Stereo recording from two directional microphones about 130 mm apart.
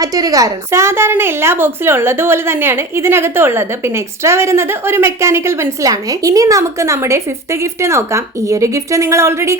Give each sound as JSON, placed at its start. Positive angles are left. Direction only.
{"t": 0.0, "sound": "a woman's voice", "side_deg": -30}